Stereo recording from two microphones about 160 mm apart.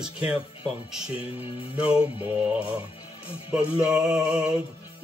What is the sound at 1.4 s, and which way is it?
Music, 35° left (ahead or behind).